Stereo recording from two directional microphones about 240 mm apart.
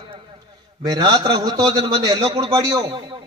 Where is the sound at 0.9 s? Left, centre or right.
Centre.